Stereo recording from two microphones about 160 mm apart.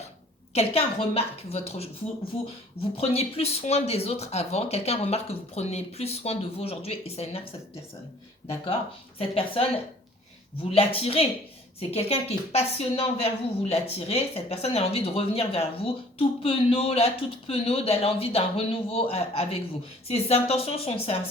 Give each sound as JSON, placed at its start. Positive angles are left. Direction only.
{"t": 0.5, "sound": "a woman's voice", "side_deg": 40}
{"t": 3.0, "sound": "a woman's voice", "side_deg": 35}
{"t": 8.4, "sound": "a woman's voice", "side_deg": 35}